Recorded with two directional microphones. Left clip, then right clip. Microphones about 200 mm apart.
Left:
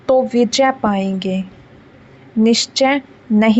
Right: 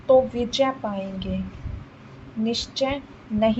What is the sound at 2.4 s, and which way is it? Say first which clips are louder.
A woman's voice: left 11 dB; 50° left (ahead or behind).